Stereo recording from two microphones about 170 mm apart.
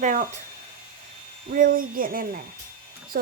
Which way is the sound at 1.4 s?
55° right (ahead or behind).